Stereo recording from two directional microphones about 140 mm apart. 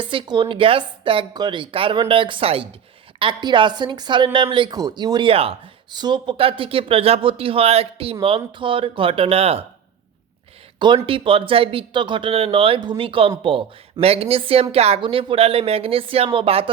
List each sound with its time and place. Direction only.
0.0 s a woman's voice: 35° right (ahead or behind)
10.8 s a woman's voice: 35° right (ahead or behind)